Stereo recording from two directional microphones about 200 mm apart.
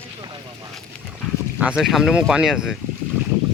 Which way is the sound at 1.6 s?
5° right (ahead or behind).